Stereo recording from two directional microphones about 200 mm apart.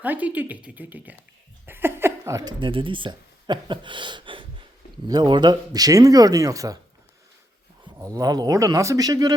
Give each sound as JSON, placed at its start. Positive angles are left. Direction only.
{"t": 0.0, "sound": "speech", "side_deg": -10}
{"t": 7.9, "sound": "speech", "side_deg": -15}